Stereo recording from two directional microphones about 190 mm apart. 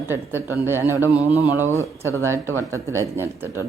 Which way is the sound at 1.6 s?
15° right (ahead or behind).